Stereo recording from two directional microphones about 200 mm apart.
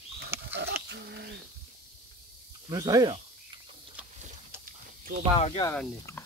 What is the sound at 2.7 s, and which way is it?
Speech, 20° right (ahead or behind).